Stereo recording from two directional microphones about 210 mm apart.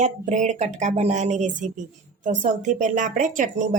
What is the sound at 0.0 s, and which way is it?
A woman's voice, 35° right (ahead or behind).